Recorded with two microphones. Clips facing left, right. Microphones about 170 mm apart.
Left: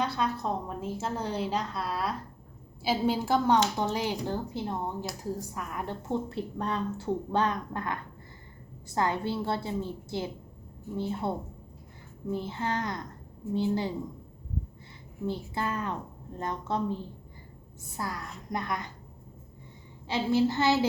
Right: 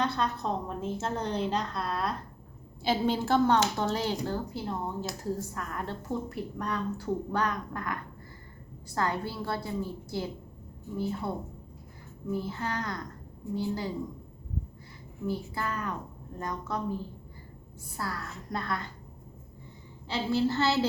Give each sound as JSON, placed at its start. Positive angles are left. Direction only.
{"t": 0.0, "sound": "a woman's voice", "side_deg": 5}
{"t": 6.1, "sound": "speech", "side_deg": 25}
{"t": 9.0, "sound": "speech", "side_deg": 20}
{"t": 15.5, "sound": "speech", "side_deg": 25}
{"t": 17.9, "sound": "a woman's voice", "side_deg": 20}
{"t": 20.1, "sound": "a woman's voice", "side_deg": 20}